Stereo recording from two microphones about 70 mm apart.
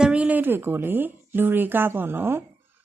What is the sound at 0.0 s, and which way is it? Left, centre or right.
Speech, centre.